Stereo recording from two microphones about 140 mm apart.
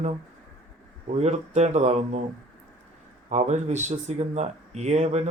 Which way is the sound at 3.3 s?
55° right (ahead or behind).